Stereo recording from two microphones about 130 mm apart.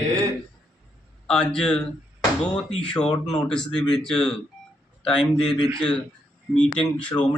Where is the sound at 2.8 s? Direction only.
5° left (ahead or behind).